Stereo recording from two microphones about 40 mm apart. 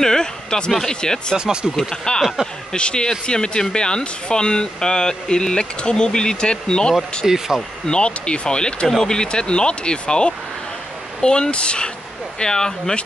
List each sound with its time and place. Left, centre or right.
0.0 s a sound: centre
0.7 s speech: centre
1.3 s speech: right
1.8 s speech: centre
7.2 s speech: centre
7.9 s speech: left